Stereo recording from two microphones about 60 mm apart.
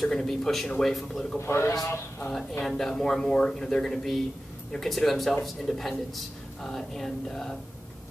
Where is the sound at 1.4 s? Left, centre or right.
Left.